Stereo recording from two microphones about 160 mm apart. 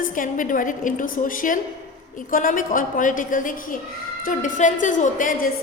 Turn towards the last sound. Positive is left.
turn(degrees=55)  # may be behind; listen again after turning